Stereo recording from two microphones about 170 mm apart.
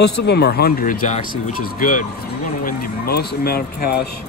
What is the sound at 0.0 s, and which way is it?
Speech, 75° left (ahead or behind).